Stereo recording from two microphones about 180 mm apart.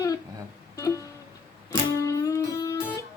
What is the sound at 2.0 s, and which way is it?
Music, 20° left (ahead or behind).